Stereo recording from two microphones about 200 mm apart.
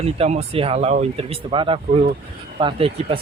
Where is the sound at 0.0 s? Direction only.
30° right (ahead or behind).